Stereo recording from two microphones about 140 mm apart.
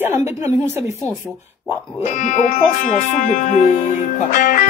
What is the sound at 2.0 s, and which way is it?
Speech, 60° left (ahead or behind).